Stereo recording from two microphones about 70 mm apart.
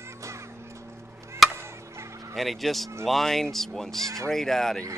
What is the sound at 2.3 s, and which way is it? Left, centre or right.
Speech, centre.